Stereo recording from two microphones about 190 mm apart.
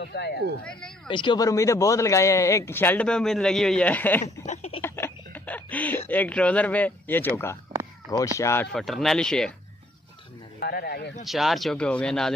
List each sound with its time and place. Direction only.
0.0 s speech: 65° left (ahead or behind)
1.0 s a man's voice: 25° left (ahead or behind); by 4.5 s 10° left (ahead or behind)
4.5 s a sound: 35° left (ahead or behind)
4.8 s a man's voice: 10° left (ahead or behind)
8.7 s speech: centre (ahead or behind)
10.6 s speech: 55° left (ahead or behind)
11.2 s speech: centre (ahead or behind)